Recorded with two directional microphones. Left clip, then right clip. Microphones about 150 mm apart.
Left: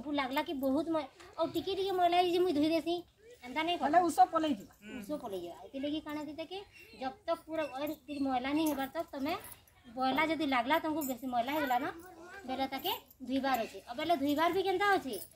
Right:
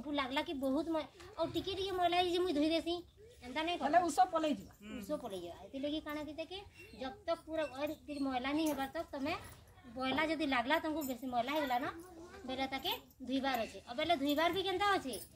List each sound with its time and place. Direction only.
0.1 s speech: 10° right (ahead or behind); by 15.1 s 35° right (ahead or behind)